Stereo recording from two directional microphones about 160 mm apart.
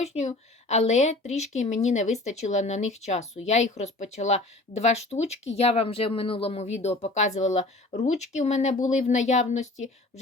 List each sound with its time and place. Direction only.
0.0 s a woman's voice: 45° left (ahead or behind)